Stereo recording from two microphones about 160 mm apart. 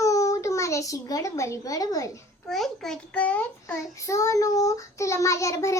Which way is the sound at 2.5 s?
Centre (ahead or behind).